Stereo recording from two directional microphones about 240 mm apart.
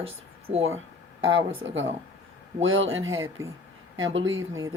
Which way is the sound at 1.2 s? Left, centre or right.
Right.